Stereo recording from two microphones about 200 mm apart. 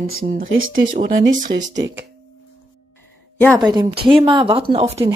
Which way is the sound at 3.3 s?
5° left (ahead or behind).